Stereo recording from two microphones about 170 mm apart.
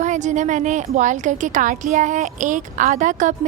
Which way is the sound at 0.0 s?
45° right (ahead or behind).